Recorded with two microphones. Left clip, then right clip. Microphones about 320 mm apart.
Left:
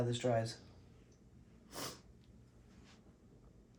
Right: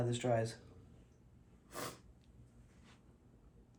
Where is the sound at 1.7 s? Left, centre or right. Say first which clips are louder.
Right 1 dB; centre.